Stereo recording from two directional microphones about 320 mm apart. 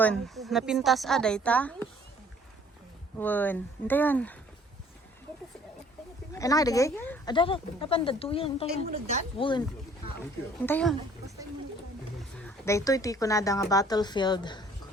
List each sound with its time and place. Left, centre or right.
0.0 s a woman's voice: centre
3.2 s a woman's voice: centre
6.3 s speech: centre
8.9 s speech: centre
9.4 s speech: centre
10.7 s a woman's voice: centre
12.4 s speech: centre